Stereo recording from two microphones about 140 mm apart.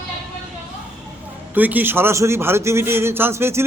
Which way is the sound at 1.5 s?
10° right (ahead or behind).